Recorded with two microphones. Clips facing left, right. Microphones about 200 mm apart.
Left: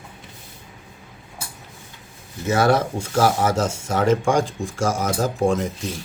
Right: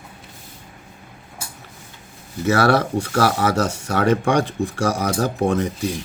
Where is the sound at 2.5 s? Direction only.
70° right (ahead or behind).